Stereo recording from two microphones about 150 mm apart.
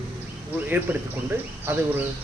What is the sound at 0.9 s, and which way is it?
Speech, 10° right (ahead or behind).